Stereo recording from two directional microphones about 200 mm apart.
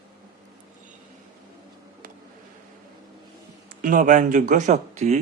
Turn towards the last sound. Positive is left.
turn(degrees=-35)  # may be behind; listen again after turning